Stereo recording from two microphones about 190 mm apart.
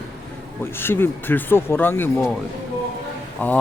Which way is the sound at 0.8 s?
10° left (ahead or behind).